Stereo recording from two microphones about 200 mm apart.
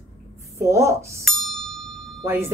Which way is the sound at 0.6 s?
15° right (ahead or behind).